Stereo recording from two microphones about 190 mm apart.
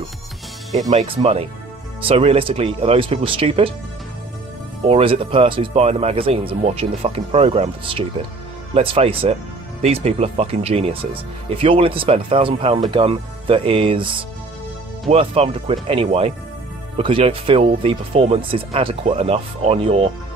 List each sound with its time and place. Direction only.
0.9 s speech: 30° right (ahead or behind)
4.8 s speech: 30° right (ahead or behind)